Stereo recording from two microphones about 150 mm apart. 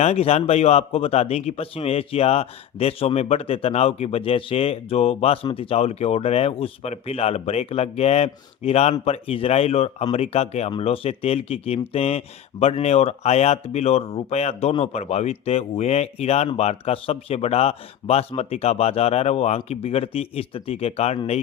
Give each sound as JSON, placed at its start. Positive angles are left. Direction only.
{"t": 0.0, "sound": "speech", "side_deg": 45}